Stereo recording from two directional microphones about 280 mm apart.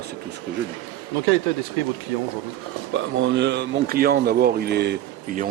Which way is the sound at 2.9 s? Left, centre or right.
Right.